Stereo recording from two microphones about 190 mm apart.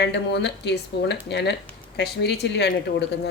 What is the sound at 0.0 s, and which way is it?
Speech, 65° left (ahead or behind).